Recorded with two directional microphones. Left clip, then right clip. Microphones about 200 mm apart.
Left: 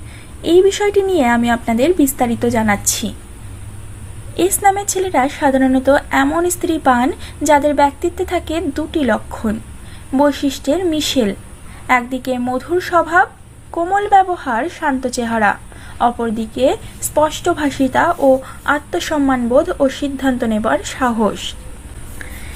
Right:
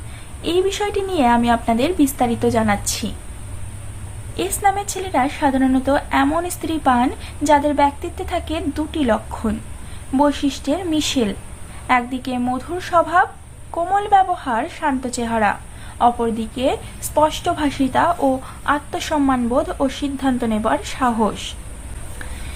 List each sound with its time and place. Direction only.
0.4 s a woman's voice: 15° left (ahead or behind)
4.4 s a woman's voice: 20° left (ahead or behind)